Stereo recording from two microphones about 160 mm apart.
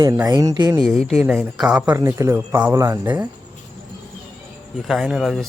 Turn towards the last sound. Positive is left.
turn(degrees=0)  # may be behind; listen again after turning